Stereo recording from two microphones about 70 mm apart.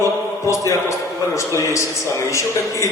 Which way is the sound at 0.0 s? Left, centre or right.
Left.